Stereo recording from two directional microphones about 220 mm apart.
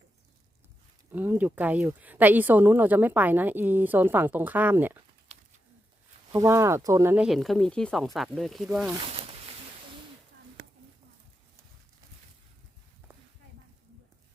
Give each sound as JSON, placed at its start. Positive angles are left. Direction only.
{"t": 1.1, "sound": "speech", "side_deg": -10}
{"t": 6.3, "sound": "speech", "side_deg": -15}